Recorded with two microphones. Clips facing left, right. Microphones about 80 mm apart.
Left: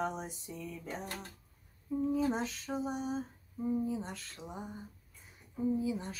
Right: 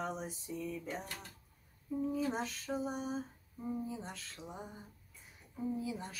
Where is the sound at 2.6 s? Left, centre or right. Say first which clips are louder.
Left 2 dB; centre.